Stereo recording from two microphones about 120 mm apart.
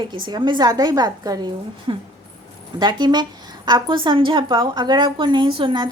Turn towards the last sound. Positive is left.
turn(degrees=-40)  # may be behind; listen again after turning